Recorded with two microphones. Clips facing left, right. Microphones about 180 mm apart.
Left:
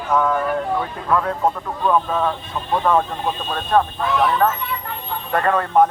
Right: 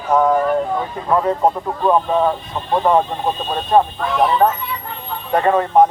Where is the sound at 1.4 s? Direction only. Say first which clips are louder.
Right 4 dB; 30° right (ahead or behind).